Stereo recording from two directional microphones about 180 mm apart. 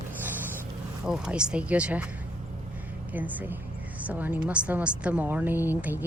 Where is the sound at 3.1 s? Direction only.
10° right (ahead or behind).